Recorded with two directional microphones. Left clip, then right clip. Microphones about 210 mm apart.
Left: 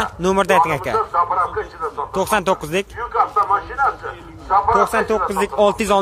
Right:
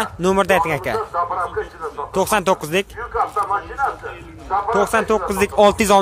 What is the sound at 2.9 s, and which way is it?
Speech, 30° left (ahead or behind).